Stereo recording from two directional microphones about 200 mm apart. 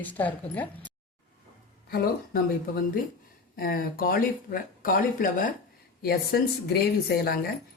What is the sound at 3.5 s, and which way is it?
Speech, 45° left (ahead or behind).